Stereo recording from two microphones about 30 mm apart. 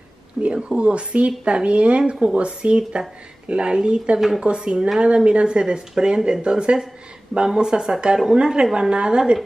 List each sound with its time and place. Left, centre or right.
0.5 s speech: right